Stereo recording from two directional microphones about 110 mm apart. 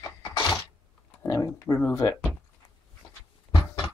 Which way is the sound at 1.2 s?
30° left (ahead or behind).